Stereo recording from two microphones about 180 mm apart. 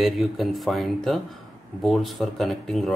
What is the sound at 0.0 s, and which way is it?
Speech, centre (ahead or behind).